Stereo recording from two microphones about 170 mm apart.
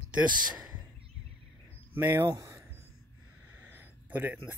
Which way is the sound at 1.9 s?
15° right (ahead or behind).